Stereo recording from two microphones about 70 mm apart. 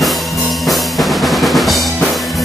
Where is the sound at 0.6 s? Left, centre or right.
Centre.